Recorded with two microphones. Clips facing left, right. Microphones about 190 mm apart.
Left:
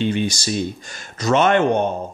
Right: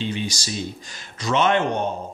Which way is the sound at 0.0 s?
55° left (ahead or behind).